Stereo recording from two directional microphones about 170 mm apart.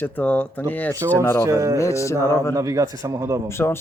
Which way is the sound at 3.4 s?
15° left (ahead or behind).